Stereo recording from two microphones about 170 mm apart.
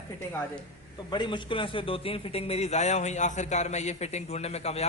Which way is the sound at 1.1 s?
25° left (ahead or behind).